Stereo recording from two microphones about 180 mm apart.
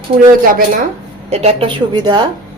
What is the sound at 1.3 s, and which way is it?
Speech, 35° right (ahead or behind).